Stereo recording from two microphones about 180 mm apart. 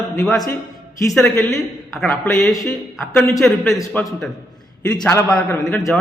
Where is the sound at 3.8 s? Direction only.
20° left (ahead or behind).